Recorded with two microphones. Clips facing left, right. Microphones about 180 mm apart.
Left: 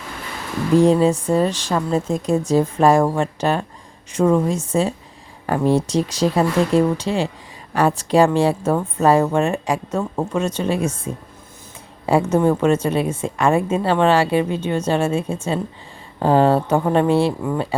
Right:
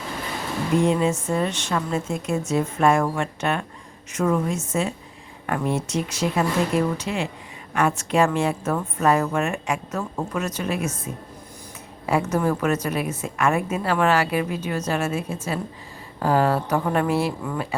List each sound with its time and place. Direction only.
0.8 s a woman's voice: 35° left (ahead or behind)